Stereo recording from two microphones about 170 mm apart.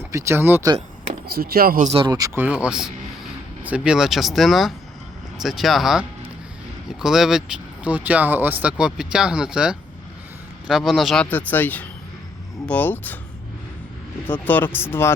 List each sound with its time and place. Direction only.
0.1 s speech: 15° right (ahead or behind)
1.3 s speech: 65° right (ahead or behind)
1.9 s speech: 30° right (ahead or behind)
2.1 s speech: 15° right (ahead or behind); by 13.1 s 10° left (ahead or behind)
14.3 s speech: 10° left (ahead or behind)